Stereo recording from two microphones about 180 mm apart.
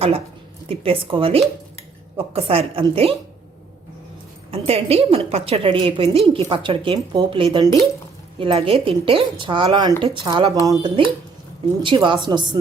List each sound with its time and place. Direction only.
0.7 s speech: 30° right (ahead or behind)
4.5 s a woman's voice: 35° right (ahead or behind)